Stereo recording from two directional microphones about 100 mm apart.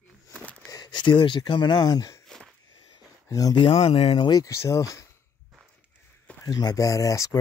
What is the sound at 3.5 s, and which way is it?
Speech, 65° left (ahead or behind).